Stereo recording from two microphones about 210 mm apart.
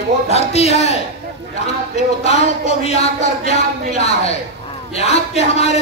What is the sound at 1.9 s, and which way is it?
A man's voice, 30° left (ahead or behind).